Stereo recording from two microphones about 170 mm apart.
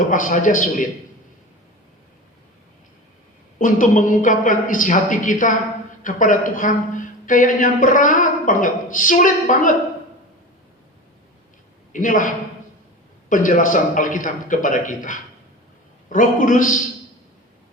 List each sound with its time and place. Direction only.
0.1 s a woman's voice: 50° left (ahead or behind)
3.6 s a woman's voice: 50° left (ahead or behind)
11.9 s a man's voice: 50° left (ahead or behind)
13.3 s a woman's voice: 50° left (ahead or behind)